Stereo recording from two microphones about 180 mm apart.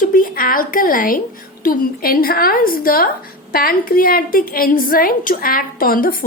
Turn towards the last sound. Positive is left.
turn(degrees=50)  # may be behind; listen again after turning